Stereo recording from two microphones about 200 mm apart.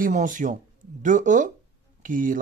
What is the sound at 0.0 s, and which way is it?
Speech, 40° right (ahead or behind).